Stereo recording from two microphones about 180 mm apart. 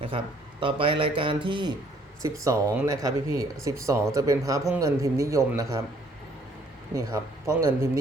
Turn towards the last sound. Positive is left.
turn(degrees=-15)  # may be behind; listen again after turning